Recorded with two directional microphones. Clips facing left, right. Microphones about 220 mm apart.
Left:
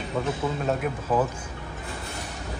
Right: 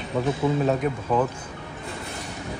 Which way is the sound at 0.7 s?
5° left (ahead or behind).